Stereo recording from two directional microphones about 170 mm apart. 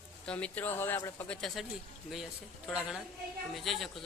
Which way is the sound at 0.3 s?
5° left (ahead or behind).